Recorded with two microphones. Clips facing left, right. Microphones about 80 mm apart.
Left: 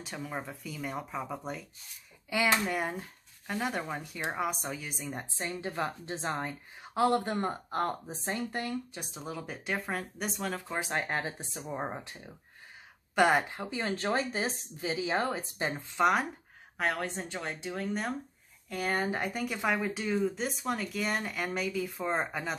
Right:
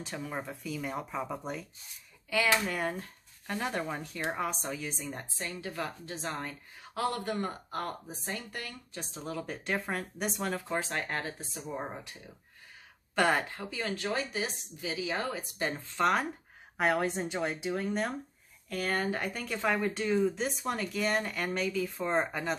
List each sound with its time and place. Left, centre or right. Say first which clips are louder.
0.0 s speech: right 1 dB; centre
2.2 s speech: even; centre
5.2 s a woman's voice: left 3 dB; left
8.9 s speech: right 2 dB; centre
10.8 s a woman's voice: left 2 dB; centre
13.1 s a woman's voice: left 2 dB; centre
16.7 s speech: right 4 dB; centre
18.7 s speech: even; centre